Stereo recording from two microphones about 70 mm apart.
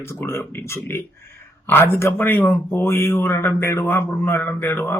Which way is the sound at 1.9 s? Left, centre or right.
Left.